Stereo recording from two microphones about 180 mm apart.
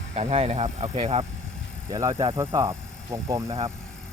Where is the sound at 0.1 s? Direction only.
35° right (ahead or behind).